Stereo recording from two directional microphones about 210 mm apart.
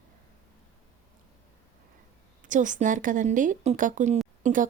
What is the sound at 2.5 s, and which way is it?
Speech, 35° right (ahead or behind).